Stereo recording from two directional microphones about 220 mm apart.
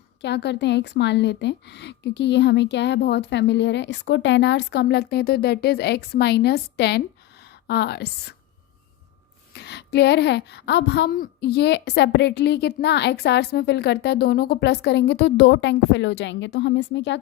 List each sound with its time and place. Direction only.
0.2 s a woman's voice: 50° left (ahead or behind)
9.5 s speech: 50° left (ahead or behind)